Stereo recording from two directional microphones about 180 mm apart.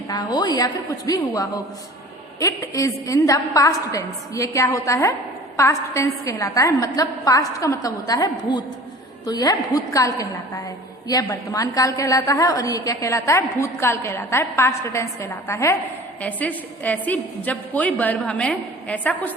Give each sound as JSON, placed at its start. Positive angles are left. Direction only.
{"t": 0.1, "sound": "a woman's voice", "side_deg": 25}